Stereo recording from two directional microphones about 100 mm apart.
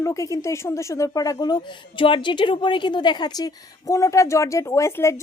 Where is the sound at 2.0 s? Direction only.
55° left (ahead or behind).